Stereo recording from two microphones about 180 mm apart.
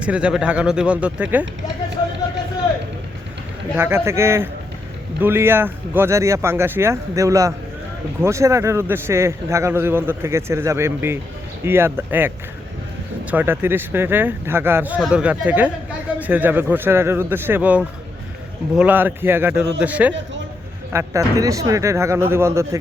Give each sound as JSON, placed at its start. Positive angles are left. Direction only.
{"t": 0.0, "sound": "a man's voice", "side_deg": -5}
{"t": 3.8, "sound": "a man's voice", "side_deg": -15}
{"t": 13.3, "sound": "a man's voice", "side_deg": -10}